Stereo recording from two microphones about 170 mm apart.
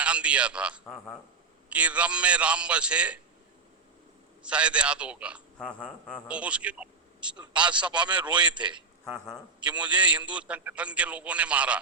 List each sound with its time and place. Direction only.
0.0 s a man's voice: 5° right (ahead or behind)
4.4 s a man's voice: 5° right (ahead or behind)
5.5 s speech: 5° left (ahead or behind)
6.2 s a man's voice: 5° right (ahead or behind)
8.2 s a man's voice: 25° right (ahead or behind)
9.0 s a man's voice: 5° left (ahead or behind)